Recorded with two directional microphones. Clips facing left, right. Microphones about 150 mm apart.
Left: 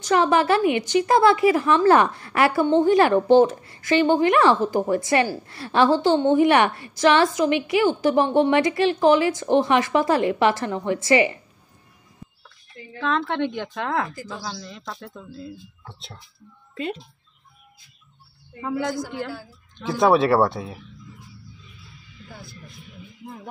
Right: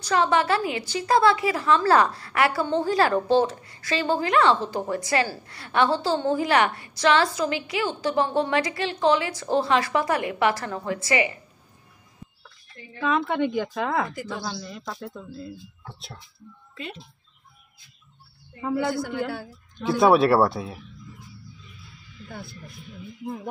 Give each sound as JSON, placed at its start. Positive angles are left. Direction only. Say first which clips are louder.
{"t": 0.0, "sound": "a woman's voice", "louder": "left 3 dB", "side_deg": 25}
{"t": 13.0, "sound": "speech", "louder": "even", "side_deg": -10}
{"t": 18.6, "sound": "speech", "louder": "right 1 dB", "side_deg": -5}